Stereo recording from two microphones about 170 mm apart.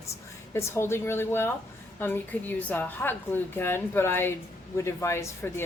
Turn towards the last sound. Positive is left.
turn(degrees=15)  # may be behind; listen again after turning